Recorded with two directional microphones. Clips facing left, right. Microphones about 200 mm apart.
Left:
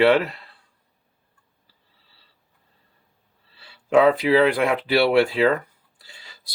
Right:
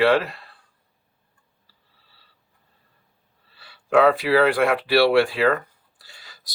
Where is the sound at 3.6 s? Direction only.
25° left (ahead or behind).